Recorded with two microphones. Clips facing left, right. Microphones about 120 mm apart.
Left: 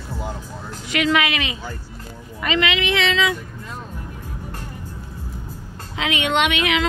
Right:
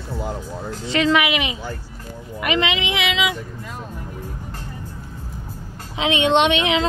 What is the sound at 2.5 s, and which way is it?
Speech, 20° right (ahead or behind).